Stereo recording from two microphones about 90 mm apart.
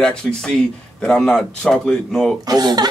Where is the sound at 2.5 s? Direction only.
50° right (ahead or behind).